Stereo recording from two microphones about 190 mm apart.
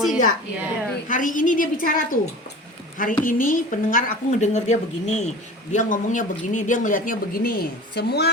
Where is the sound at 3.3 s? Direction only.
45° left (ahead or behind).